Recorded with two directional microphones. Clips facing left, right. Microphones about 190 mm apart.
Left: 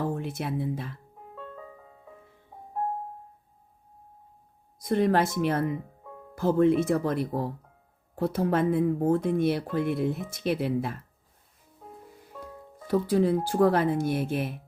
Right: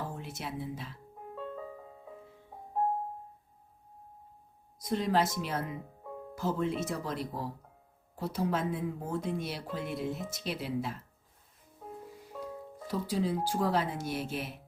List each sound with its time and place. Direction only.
0.0 s speech: 55° left (ahead or behind)
4.8 s speech: 55° left (ahead or behind)
12.9 s speech: 55° left (ahead or behind)